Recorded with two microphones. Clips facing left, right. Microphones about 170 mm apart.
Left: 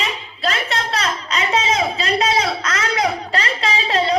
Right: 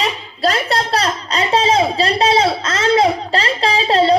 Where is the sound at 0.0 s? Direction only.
35° right (ahead or behind).